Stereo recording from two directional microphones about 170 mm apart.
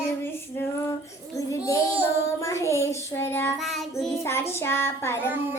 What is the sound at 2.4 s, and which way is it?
Child singing, 15° left (ahead or behind).